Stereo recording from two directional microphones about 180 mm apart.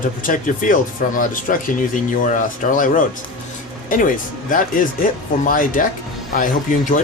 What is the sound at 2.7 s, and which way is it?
Speech, 45° left (ahead or behind).